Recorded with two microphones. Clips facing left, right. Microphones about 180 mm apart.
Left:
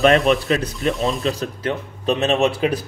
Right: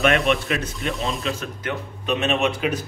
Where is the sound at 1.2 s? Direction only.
35° left (ahead or behind).